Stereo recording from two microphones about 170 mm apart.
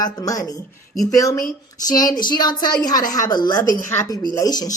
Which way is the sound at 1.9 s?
25° left (ahead or behind).